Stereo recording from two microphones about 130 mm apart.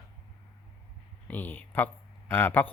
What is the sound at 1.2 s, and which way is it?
Speech, 15° left (ahead or behind).